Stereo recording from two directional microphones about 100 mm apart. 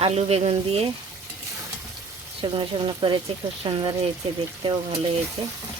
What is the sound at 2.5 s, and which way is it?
Speech, 55° right (ahead or behind).